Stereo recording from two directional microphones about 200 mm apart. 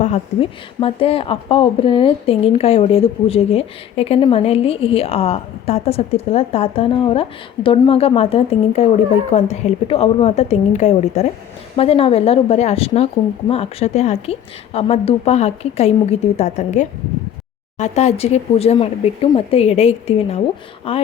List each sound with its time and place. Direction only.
0.0 s a woman's voice: 30° left (ahead or behind)